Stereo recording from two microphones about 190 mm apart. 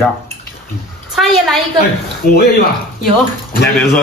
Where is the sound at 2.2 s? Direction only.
50° left (ahead or behind).